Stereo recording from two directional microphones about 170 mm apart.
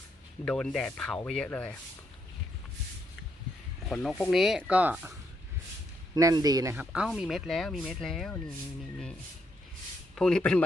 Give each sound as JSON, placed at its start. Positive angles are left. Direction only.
{"t": 0.4, "sound": "speech", "side_deg": 5}
{"t": 3.8, "sound": "speech", "side_deg": 0}
{"t": 6.1, "sound": "speech", "side_deg": -20}
{"t": 10.2, "sound": "speech", "side_deg": 5}